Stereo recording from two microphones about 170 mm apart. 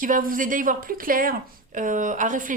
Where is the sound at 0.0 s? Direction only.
55° right (ahead or behind).